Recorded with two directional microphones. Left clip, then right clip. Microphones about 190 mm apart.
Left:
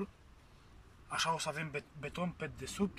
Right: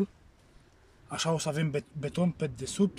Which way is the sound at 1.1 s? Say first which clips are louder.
Right 4 dB; 35° right (ahead or behind).